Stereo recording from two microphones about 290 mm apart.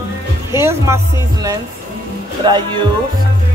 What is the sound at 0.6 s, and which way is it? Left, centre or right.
Music, centre.